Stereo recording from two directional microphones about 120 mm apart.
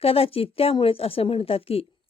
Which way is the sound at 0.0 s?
55° left (ahead or behind).